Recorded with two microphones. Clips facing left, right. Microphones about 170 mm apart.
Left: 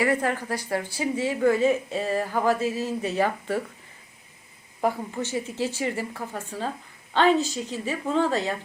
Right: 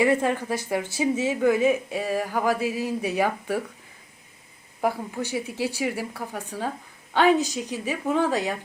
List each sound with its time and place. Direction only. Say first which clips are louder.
0.0 s a woman's voice: right 3 dB; 20° right (ahead or behind)
4.8 s speech: even; 10° right (ahead or behind)